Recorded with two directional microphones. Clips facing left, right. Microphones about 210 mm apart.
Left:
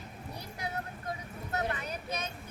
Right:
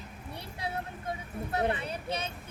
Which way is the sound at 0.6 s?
30° right (ahead or behind).